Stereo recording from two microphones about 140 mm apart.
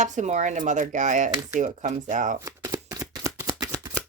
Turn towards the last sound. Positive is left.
turn(degrees=-25)  # may be behind; listen again after turning